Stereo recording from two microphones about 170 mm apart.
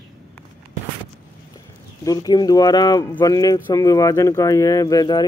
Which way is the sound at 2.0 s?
20° left (ahead or behind).